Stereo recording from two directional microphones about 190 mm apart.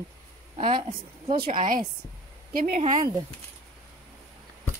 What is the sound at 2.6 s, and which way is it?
Speech, 45° right (ahead or behind).